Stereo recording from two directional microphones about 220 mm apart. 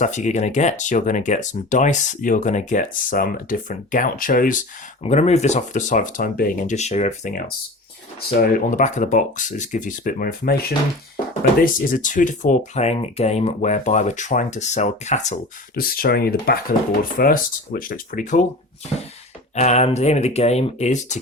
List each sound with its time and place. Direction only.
0.0 s speech: 35° left (ahead or behind)
19.5 s speech: 30° left (ahead or behind)